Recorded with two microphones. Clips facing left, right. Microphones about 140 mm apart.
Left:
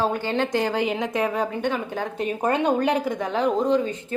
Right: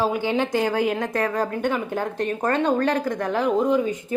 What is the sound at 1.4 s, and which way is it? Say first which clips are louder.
Speech: right 1 dB; 5° right (ahead or behind).